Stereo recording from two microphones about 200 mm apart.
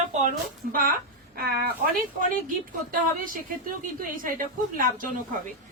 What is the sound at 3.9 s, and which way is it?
A woman's voice, 45° right (ahead or behind).